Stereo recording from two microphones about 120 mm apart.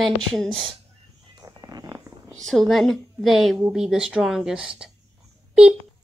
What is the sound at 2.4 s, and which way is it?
A woman's voice, centre (ahead or behind).